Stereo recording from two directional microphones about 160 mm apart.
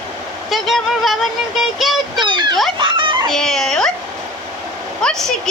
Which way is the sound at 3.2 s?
5° left (ahead or behind).